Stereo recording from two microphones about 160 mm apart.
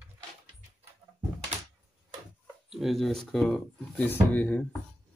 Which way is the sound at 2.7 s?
Centre (ahead or behind).